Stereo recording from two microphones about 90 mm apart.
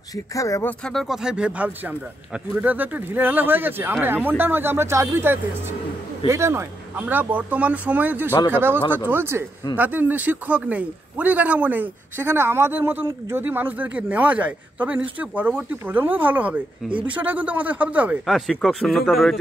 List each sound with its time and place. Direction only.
0.1 s speech: 40° left (ahead or behind)
0.8 s a man's voice: centre (ahead or behind); by 18.2 s 15° right (ahead or behind)
18.2 s a man's voice: centre (ahead or behind)